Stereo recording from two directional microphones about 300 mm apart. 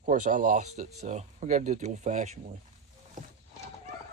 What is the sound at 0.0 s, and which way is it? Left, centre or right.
Speech, right.